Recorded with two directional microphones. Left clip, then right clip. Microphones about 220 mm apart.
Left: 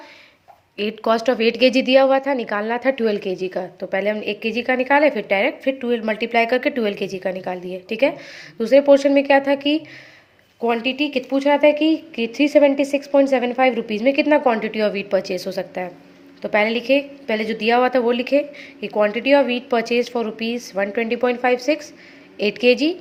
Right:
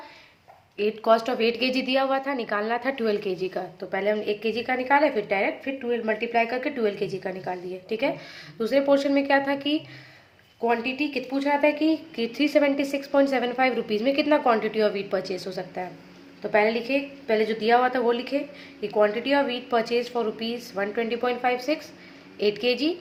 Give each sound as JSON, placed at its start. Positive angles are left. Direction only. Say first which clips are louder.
{"t": 0.8, "sound": "a woman's voice", "louder": "left 1 dB", "side_deg": 35}